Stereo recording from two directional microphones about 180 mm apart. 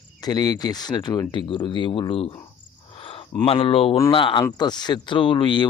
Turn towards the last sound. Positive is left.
turn(degrees=25)  # may be behind; listen again after turning